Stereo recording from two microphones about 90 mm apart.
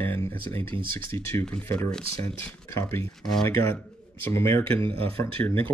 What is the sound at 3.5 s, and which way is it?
Speech, 25° left (ahead or behind).